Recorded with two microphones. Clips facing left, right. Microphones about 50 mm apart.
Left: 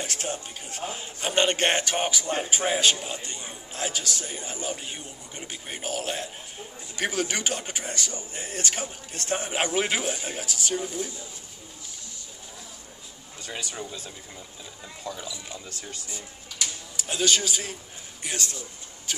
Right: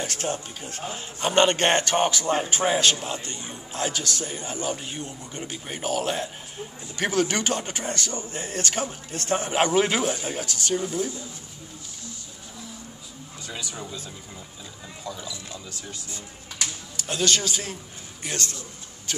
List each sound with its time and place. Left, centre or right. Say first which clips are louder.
0.0 s a man's voice: right 3 dB; centre
13.5 s speech: left 1 dB; left
15.0 s speech: even; left
16.9 s a man's voice: right 1 dB; centre